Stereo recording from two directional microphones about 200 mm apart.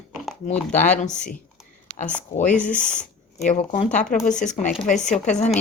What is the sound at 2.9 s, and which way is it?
Speech, 35° left (ahead or behind).